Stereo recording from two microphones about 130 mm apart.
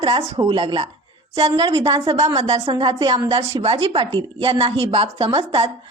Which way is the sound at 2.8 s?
40° right (ahead or behind).